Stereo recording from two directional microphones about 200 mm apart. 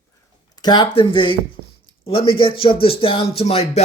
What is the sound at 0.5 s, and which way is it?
Speech, 20° left (ahead or behind).